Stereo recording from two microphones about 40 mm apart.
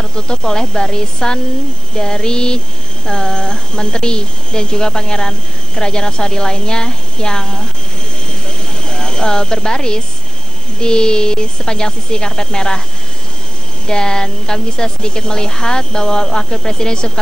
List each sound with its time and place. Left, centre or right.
0.1 s speech: left
8.5 s a sound: centre
10.8 s speech: centre
13.8 s a woman's voice: centre